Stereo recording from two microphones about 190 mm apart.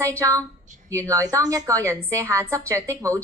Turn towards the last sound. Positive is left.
turn(degrees=-15)  # may be behind; listen again after turning